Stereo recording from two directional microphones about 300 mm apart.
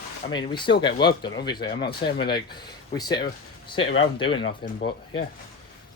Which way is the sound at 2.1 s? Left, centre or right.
Left.